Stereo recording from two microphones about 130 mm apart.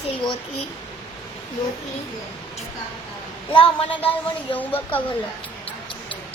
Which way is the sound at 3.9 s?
15° left (ahead or behind).